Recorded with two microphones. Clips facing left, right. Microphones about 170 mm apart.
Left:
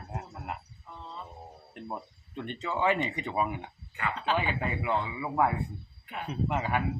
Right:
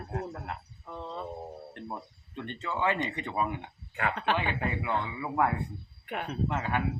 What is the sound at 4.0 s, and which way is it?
Speech, 60° right (ahead or behind).